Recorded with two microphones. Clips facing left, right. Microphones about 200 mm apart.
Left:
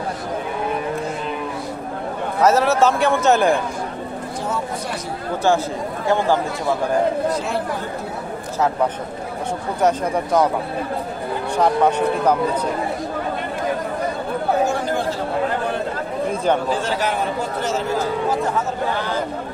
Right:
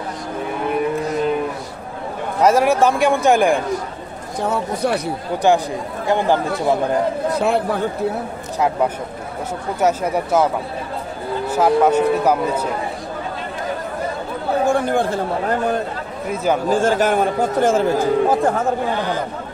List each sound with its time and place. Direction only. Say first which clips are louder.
2.4 s speech: right 1 dB; 15° right (ahead or behind)
4.5 s speech: right 8 dB; 65° right (ahead or behind)
6.0 s speech: right 1 dB; 15° right (ahead or behind)
7.3 s speech: right 5 dB; 60° right (ahead or behind)
9.8 s speech: right 1 dB; 10° right (ahead or behind)
11.5 s speech: right 3 dB; 5° right (ahead or behind)
14.7 s chatter: right 4 dB; 55° right (ahead or behind)
16.6 s speech: right 5 dB; 45° right (ahead or behind)